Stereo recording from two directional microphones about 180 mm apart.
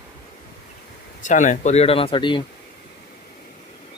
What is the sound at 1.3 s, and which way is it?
Speech, 45° left (ahead or behind).